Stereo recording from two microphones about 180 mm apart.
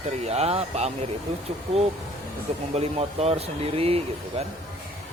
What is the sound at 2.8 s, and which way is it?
Speech, 35° right (ahead or behind).